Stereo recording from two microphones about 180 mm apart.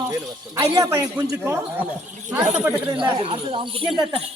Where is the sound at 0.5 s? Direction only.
25° right (ahead or behind).